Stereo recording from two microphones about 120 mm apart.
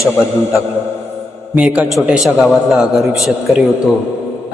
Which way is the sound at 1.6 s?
10° right (ahead or behind).